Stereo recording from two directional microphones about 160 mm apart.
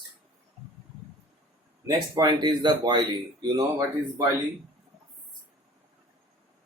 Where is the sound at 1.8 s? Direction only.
30° right (ahead or behind).